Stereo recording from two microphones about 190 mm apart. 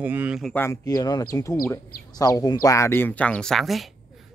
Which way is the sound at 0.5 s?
15° left (ahead or behind).